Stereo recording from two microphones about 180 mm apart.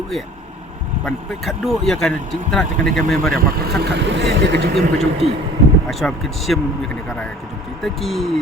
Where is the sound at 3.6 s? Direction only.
65° right (ahead or behind).